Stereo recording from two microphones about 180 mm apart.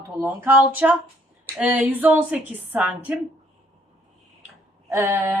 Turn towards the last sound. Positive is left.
turn(degrees=-15)  # may be behind; listen again after turning